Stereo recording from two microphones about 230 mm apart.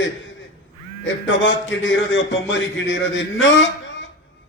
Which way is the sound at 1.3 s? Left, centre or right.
Left.